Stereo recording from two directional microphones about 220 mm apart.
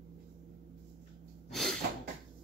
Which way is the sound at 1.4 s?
Centre (ahead or behind).